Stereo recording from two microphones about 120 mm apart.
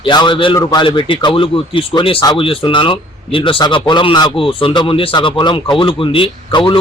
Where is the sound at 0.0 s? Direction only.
40° left (ahead or behind).